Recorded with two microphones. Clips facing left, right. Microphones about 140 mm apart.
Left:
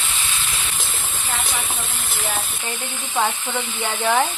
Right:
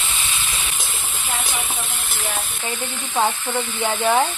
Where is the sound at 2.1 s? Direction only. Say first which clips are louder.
Left 1 dB; centre (ahead or behind).